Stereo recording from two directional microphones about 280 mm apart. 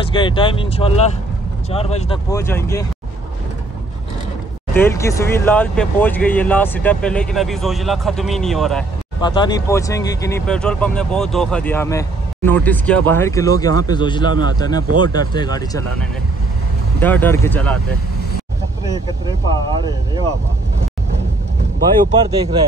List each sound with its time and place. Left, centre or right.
0.0 s speech: centre
2.3 s speech: centre
4.7 s speech: centre
9.2 s speech: centre
19.5 s speech: centre